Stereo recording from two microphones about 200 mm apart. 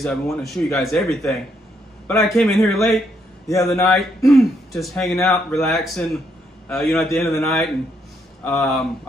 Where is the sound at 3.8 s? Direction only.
Centre (ahead or behind).